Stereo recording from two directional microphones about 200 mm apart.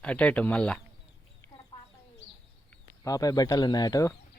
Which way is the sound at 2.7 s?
15° left (ahead or behind).